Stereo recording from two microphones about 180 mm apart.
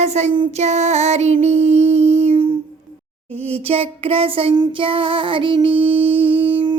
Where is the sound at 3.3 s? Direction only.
35° right (ahead or behind).